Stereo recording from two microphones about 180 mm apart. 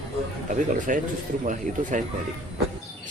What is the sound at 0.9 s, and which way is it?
Speech, 50° right (ahead or behind).